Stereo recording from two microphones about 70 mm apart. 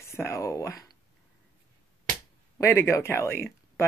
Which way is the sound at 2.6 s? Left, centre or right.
Left.